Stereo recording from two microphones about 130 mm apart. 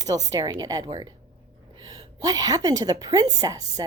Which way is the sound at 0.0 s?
25° right (ahead or behind).